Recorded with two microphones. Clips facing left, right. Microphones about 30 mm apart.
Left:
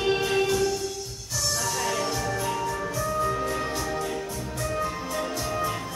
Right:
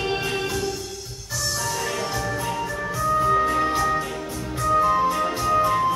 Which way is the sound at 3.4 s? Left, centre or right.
Right.